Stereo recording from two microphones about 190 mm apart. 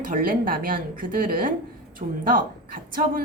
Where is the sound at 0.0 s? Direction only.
50° right (ahead or behind).